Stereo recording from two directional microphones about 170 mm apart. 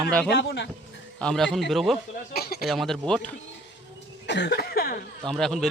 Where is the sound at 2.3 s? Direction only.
65° left (ahead or behind).